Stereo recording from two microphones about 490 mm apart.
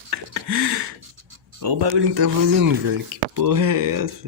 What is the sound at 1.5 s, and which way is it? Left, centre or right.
Speech, right.